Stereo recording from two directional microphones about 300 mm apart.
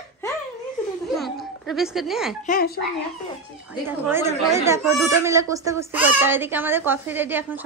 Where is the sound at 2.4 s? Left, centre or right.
Left.